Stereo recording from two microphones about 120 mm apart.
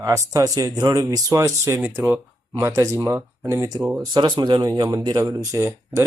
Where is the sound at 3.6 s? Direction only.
35° right (ahead or behind).